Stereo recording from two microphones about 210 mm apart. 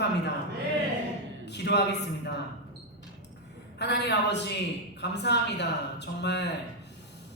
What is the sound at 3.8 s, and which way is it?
Speech, 55° left (ahead or behind).